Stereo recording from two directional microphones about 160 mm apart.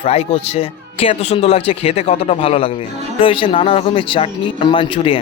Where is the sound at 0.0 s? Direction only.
40° left (ahead or behind).